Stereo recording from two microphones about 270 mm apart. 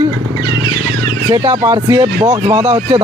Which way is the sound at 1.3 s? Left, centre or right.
Centre.